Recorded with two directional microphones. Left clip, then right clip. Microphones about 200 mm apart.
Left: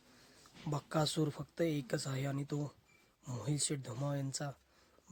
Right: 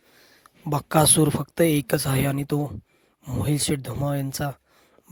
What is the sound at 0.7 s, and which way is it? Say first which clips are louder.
Speech: right 16 dB; 50° right (ahead or behind).